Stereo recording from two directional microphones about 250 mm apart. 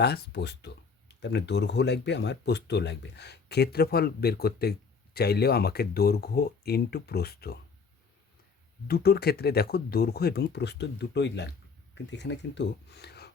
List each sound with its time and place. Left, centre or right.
0.0 s speech: left
8.9 s speech: left